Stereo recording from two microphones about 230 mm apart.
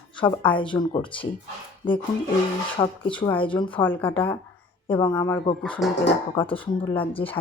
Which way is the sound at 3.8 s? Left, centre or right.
Centre.